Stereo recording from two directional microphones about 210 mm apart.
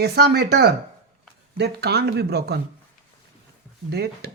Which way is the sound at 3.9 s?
50° right (ahead or behind).